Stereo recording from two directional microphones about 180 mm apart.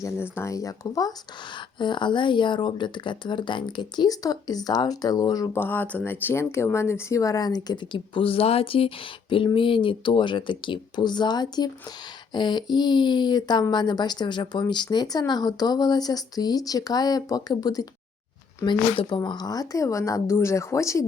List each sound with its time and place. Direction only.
0.0 s a woman's voice: 15° left (ahead or behind)